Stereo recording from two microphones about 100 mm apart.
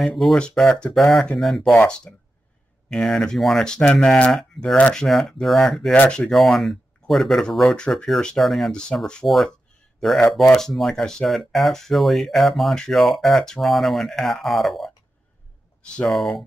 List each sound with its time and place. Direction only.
0.0 s speech: centre (ahead or behind)
16.1 s speech: centre (ahead or behind)